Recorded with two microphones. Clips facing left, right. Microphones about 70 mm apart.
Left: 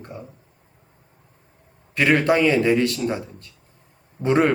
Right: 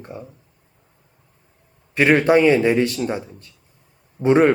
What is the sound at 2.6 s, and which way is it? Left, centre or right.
Speech, centre.